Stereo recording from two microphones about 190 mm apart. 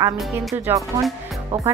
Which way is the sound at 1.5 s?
35° right (ahead or behind).